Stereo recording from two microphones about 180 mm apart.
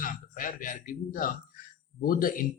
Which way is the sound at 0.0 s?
50° left (ahead or behind).